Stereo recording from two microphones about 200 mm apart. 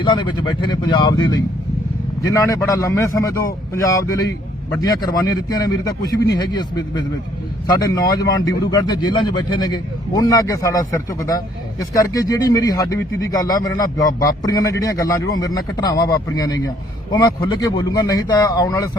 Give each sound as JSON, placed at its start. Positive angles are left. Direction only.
{"t": 0.0, "sound": "speech", "side_deg": 25}
{"t": 2.2, "sound": "speech", "side_deg": 15}